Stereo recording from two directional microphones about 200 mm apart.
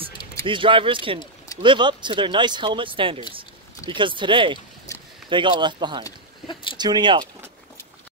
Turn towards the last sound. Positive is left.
turn(degrees=-20)  # may be behind; listen again after turning